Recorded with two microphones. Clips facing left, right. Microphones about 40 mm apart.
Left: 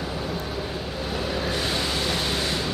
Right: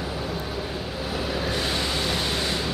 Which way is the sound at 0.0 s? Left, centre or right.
Centre.